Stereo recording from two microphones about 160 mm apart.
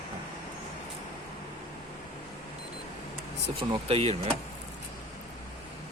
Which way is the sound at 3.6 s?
35° right (ahead or behind).